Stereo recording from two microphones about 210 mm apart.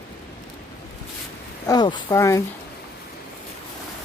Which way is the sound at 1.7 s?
20° left (ahead or behind).